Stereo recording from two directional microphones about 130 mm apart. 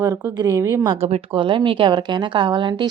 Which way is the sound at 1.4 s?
40° right (ahead or behind).